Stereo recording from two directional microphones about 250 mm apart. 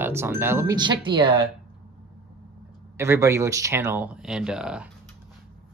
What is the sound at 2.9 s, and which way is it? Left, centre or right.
Speech, centre.